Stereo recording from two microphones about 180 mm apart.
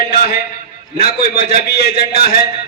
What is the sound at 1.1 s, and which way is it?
A man's voice, 60° left (ahead or behind).